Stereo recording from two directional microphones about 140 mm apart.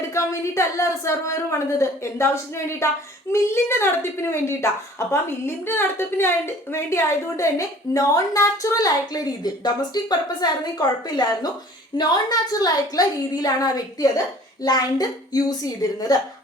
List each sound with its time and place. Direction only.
0.1 s a woman's voice: 20° left (ahead or behind)